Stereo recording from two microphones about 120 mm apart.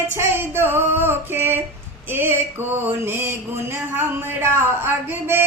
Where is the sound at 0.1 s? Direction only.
20° right (ahead or behind).